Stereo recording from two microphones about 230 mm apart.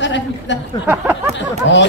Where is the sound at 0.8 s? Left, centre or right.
Centre.